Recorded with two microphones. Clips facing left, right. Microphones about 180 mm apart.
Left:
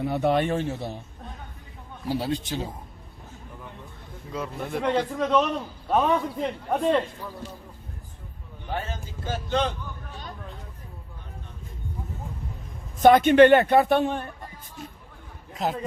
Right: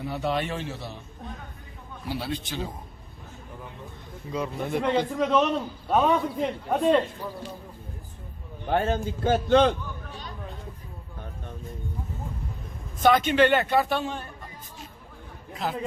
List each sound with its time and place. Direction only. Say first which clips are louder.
0.0 s speech: left 5 dB; 50° left (ahead or behind)
2.0 s speech: left 4 dB; 40° left (ahead or behind)
4.3 s a man's voice: right 3 dB; centre (ahead or behind)
8.7 s a man's voice: right 8 dB; 60° right (ahead or behind)
13.0 s speech: left 5 dB; 50° left (ahead or behind)